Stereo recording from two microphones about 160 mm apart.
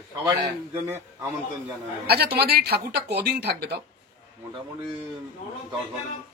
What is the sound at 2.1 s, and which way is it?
A man's voice, 85° right.